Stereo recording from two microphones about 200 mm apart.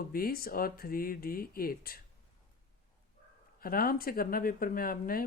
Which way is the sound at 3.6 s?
45° left (ahead or behind).